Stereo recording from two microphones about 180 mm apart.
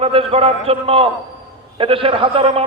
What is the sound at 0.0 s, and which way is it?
A man's voice, 30° right (ahead or behind).